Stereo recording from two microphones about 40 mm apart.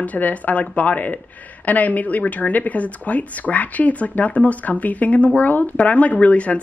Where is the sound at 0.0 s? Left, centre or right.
Left.